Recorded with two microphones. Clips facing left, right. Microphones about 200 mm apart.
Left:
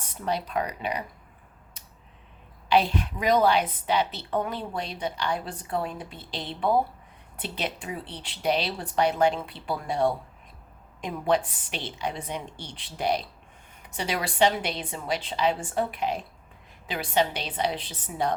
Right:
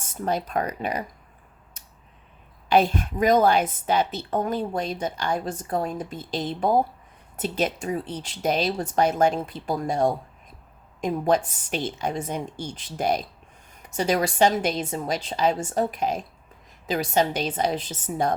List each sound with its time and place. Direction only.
0.1 s a woman's voice: 45° right (ahead or behind)
1.7 s a sound: 45° right (ahead or behind)
2.6 s a woman's voice: 45° right (ahead or behind)